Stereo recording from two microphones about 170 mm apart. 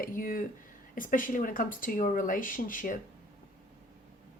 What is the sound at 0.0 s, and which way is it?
Speech, 55° left (ahead or behind).